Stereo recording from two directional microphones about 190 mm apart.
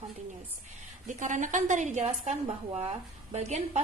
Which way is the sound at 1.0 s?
40° right (ahead or behind).